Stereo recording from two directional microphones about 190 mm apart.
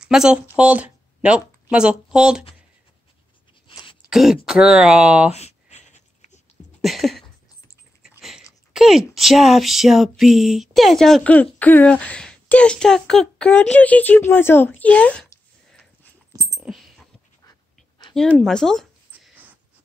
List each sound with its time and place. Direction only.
0.0 s speech: 5° right (ahead or behind)
4.1 s speech: centre (ahead or behind)
5.3 s writing: 35° left (ahead or behind)
6.8 s a sound: centre (ahead or behind)
8.2 s a woman's voice: centre (ahead or behind)
16.5 s dog: centre (ahead or behind)
17.5 s pant: 25° left (ahead or behind)
18.4 s a sound: 5° left (ahead or behind)